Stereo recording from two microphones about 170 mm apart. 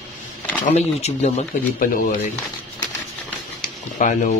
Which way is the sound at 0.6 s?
45° left (ahead or behind).